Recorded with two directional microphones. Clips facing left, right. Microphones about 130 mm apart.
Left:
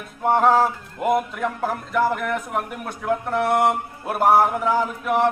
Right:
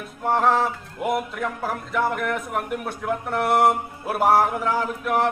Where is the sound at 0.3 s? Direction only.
Centre (ahead or behind).